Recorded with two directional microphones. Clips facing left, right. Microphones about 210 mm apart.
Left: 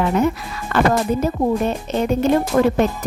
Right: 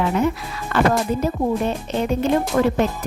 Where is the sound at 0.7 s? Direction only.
50° left (ahead or behind).